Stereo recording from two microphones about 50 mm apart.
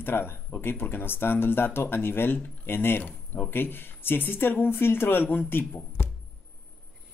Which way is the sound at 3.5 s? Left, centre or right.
Left.